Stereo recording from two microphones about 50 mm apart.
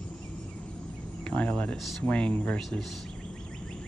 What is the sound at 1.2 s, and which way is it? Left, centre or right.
Cricket, left.